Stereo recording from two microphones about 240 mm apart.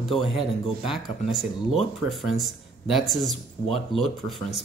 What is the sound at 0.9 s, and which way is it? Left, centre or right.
Speech, centre.